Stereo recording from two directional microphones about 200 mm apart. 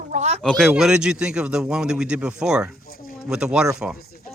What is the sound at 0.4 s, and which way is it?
A man's voice, centre (ahead or behind).